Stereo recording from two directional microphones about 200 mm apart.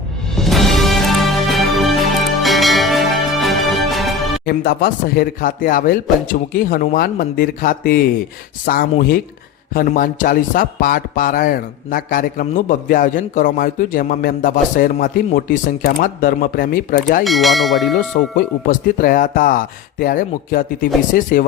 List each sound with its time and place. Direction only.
0.3 s music: centre (ahead or behind)
4.4 s speech: 50° left (ahead or behind)
17.2 s speech: centre (ahead or behind)
17.9 s speech: 45° left (ahead or behind)